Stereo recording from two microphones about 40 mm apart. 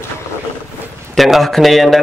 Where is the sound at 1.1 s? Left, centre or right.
Centre.